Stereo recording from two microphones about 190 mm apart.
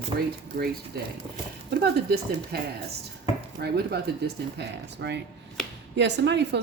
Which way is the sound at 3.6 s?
60° right (ahead or behind).